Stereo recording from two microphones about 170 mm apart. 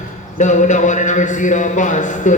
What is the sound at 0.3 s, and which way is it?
A man's voice, 45° left (ahead or behind).